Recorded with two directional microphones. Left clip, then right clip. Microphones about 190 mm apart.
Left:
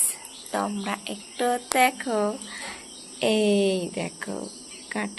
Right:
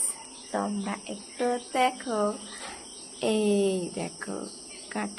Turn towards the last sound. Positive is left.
turn(degrees=0)  # may be behind; listen again after turning